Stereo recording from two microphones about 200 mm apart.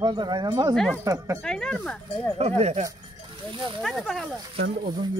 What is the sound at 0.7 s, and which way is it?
Speech, centre (ahead or behind).